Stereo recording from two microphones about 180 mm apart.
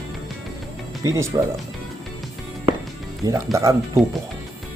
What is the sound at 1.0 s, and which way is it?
Speech, 15° right (ahead or behind).